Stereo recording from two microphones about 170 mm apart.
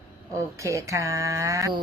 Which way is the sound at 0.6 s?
20° right (ahead or behind).